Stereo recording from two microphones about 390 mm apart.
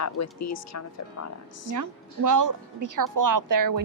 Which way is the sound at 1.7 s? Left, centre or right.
Right.